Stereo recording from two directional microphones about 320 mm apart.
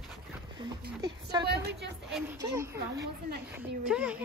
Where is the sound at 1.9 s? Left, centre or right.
Centre.